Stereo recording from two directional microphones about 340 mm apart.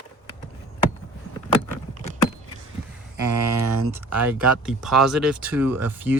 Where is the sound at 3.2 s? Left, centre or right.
Right.